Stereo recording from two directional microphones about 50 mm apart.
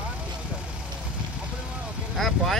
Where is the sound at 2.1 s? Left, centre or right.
Centre.